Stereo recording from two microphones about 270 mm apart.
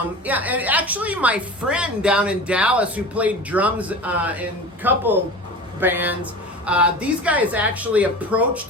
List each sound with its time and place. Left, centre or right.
0.3 s a woman's voice: centre